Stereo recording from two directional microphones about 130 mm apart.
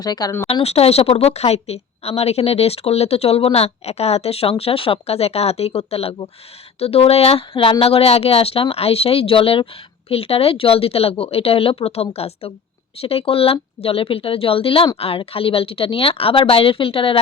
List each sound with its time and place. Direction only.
0.0 s speech: 30° left (ahead or behind)
0.4 s a woman's voice: 50° left (ahead or behind)